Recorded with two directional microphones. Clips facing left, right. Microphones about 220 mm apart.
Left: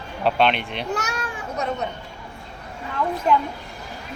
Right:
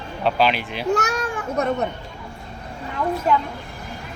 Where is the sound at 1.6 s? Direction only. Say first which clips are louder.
Right 5 dB; 55° right (ahead or behind).